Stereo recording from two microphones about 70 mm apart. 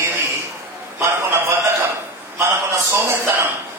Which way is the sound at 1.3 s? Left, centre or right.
Right.